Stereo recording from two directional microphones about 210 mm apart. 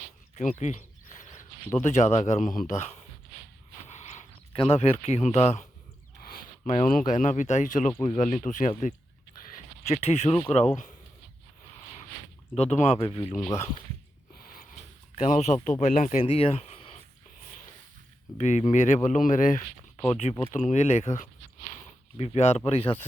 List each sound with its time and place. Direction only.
0.3 s a sound: 35° left (ahead or behind)
1.8 s speech: 35° left (ahead or behind)
3.8 s a sound: 35° left (ahead or behind)
6.2 s speech: 40° left (ahead or behind)
9.8 s speech: 30° left (ahead or behind)
12.5 s speech: 30° left (ahead or behind)
13.3 s speech: 10° left (ahead or behind)
14.3 s a sound: 45° left (ahead or behind)
15.1 s speech: 30° left (ahead or behind)
18.3 s speech: 35° left (ahead or behind)
20.0 s speech: 30° left (ahead or behind)